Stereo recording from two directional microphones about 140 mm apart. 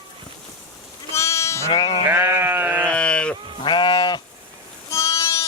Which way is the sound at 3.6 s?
35° left (ahead or behind).